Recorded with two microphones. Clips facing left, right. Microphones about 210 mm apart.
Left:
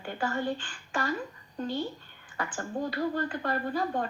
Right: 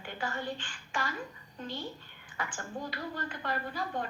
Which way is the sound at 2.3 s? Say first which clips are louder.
Left 5 dB; 40° left (ahead or behind).